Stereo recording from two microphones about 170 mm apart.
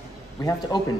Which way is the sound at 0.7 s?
20° left (ahead or behind).